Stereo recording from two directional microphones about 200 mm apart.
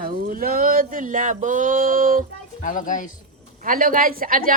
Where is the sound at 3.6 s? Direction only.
45° right (ahead or behind).